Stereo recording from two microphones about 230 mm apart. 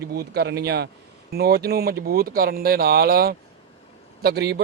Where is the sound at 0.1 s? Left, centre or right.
Right.